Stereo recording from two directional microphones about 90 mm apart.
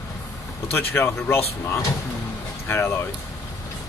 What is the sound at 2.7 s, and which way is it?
Speech, 30° left (ahead or behind).